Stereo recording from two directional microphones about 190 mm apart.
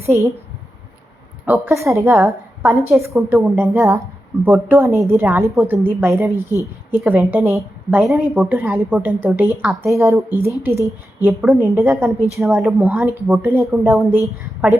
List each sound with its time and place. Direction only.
1.5 s a woman's voice: 10° right (ahead or behind)